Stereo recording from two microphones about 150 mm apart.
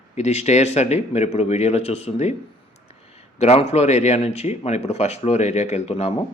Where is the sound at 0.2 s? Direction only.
45° left (ahead or behind).